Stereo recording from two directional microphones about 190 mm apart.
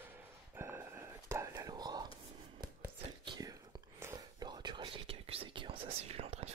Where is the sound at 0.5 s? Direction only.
15° right (ahead or behind).